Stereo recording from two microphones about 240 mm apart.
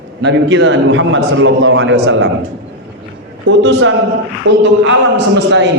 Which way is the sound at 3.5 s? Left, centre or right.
Right.